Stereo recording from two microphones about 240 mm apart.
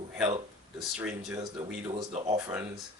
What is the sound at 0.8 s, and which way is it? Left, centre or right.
Speech, centre.